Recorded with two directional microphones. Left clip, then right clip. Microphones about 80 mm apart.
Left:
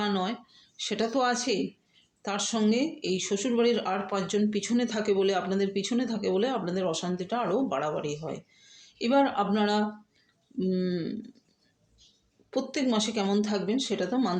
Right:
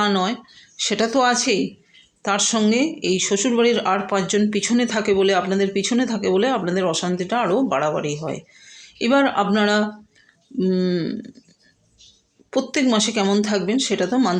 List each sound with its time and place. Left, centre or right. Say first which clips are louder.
0.0 s speech: right 10 dB; right
12.5 s speech: right 9 dB; right